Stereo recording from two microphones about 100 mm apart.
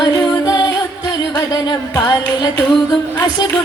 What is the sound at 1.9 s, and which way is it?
Music, 50° left (ahead or behind).